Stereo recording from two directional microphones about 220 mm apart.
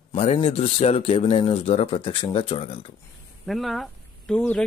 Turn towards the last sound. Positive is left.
turn(degrees=5)  # may be behind; listen again after turning